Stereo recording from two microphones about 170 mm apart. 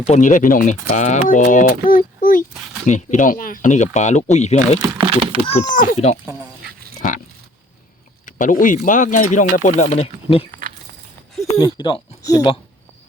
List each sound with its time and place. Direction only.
0.1 s speech: 50° left (ahead or behind)
2.8 s speech: 45° left (ahead or behind)
4.9 s a child's voice: 30° right (ahead or behind)
5.5 s speech: 45° left (ahead or behind)
8.2 s speech: 50° left (ahead or behind)
11.5 s speech: 25° left (ahead or behind)